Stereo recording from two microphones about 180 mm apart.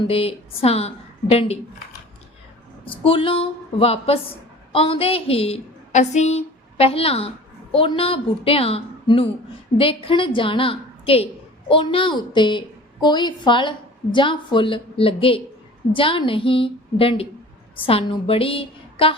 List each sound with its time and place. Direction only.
0.0 s a woman's voice: 30° left (ahead or behind)
2.8 s a woman's voice: 30° left (ahead or behind)